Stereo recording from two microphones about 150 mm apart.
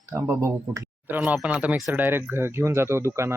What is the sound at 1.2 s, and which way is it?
Speech, 5° right (ahead or behind).